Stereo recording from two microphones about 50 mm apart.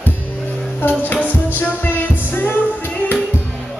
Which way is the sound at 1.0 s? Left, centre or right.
Left.